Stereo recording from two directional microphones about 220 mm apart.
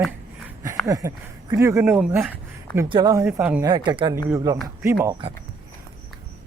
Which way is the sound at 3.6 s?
20° right (ahead or behind).